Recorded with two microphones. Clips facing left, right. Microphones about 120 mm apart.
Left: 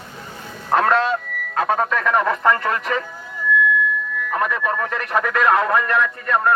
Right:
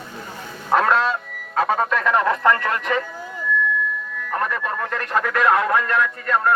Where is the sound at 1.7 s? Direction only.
Centre (ahead or behind).